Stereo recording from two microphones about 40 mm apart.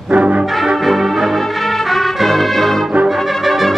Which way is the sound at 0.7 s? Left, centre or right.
Centre.